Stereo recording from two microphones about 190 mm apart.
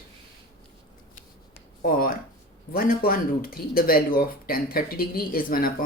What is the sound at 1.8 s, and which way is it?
Speech, 50° left (ahead or behind).